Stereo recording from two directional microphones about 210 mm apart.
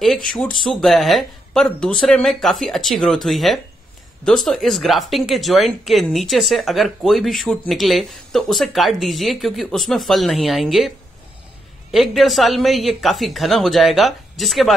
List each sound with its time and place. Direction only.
0.7 s speech: centre (ahead or behind)
11.9 s speech: centre (ahead or behind)